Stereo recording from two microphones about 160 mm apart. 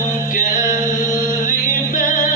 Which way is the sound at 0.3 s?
55° left (ahead or behind).